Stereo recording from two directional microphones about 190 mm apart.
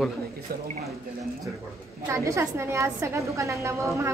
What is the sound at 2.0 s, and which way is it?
A woman's voice, 15° right (ahead or behind).